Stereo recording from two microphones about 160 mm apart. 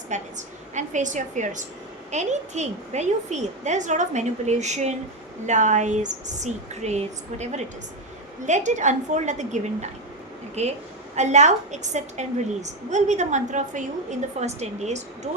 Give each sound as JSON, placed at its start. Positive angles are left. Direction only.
{"t": 0.1, "sound": "a woman's voice", "side_deg": -50}